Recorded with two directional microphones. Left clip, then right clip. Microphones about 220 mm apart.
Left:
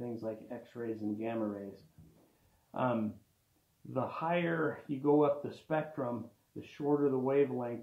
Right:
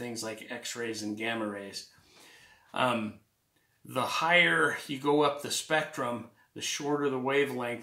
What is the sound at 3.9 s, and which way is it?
Speech, 30° right (ahead or behind).